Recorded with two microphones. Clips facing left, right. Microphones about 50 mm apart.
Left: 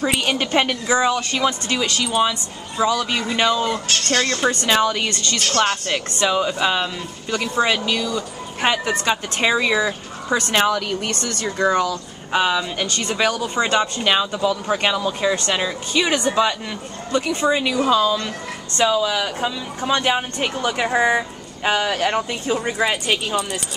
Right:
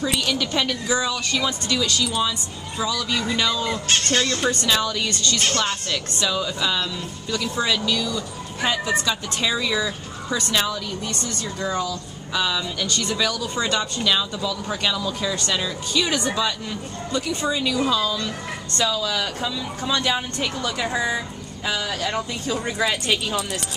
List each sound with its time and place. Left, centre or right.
0.0 s speech: left
10.9 s speech: left
22.6 s speech: left